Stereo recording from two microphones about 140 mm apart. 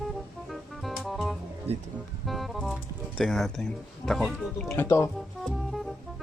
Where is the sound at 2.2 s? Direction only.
Centre (ahead or behind).